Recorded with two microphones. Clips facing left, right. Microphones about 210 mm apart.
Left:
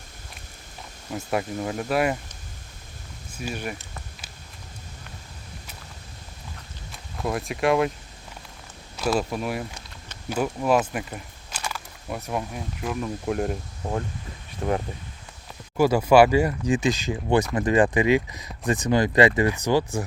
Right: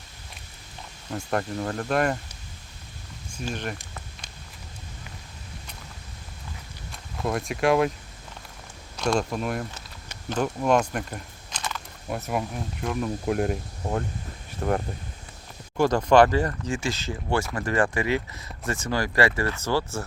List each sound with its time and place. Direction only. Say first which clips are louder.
1.1 s speech: left 1 dB; 5° left (ahead or behind)
3.3 s speech: even; 10° left (ahead or behind)
6.9 s speech: even; centre (ahead or behind)
9.0 s speech: even; 5° left (ahead or behind)
12.0 s speech: right 1 dB; centre (ahead or behind)
15.8 s speech: left 2 dB; 10° left (ahead or behind)